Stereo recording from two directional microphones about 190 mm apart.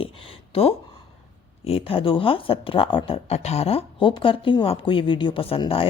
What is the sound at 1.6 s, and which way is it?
Speech, 30° left (ahead or behind).